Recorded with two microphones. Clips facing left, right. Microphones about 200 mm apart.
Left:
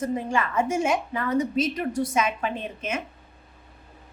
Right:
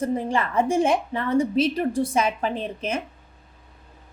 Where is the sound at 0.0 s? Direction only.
35° right (ahead or behind).